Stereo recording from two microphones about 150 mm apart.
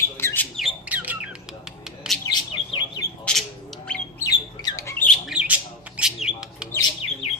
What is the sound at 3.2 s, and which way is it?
Bird, 5° left (ahead or behind).